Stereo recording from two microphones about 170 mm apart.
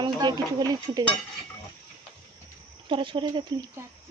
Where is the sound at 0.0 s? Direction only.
25° right (ahead or behind).